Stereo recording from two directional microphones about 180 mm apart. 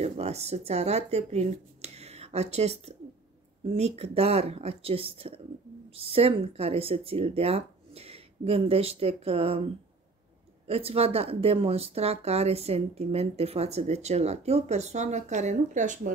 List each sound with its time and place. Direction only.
0.0 s speech: 35° right (ahead or behind)
10.7 s speech: 35° right (ahead or behind)